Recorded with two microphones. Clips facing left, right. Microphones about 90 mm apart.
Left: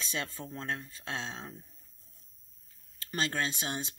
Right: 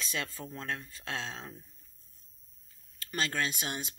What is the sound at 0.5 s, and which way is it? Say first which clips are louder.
Speech: left 1 dB; 25° left (ahead or behind).